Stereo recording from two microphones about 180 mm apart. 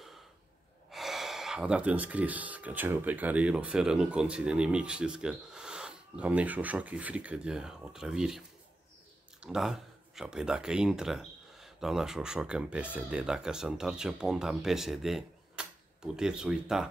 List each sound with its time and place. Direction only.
0.9 s speech: centre (ahead or behind)
9.4 s speech: 5° right (ahead or behind)